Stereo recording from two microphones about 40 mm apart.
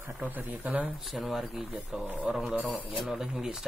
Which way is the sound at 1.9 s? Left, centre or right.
Right.